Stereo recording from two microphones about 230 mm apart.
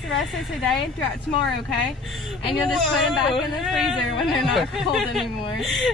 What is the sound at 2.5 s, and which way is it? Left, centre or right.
Speech, centre.